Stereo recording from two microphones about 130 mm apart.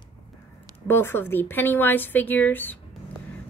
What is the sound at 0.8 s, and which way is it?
A woman's voice, 20° left (ahead or behind).